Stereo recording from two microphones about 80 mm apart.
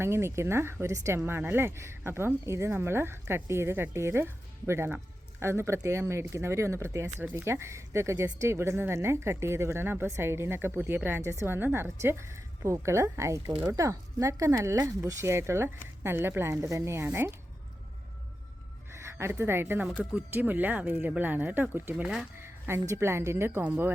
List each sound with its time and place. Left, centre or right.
0.0 s speech: right
1.2 s speech: right
19.0 s speech: right
22.0 s speech: centre
22.4 s a sound: right
22.9 s speech: right